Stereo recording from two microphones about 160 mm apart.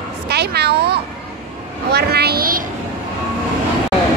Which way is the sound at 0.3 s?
90° right.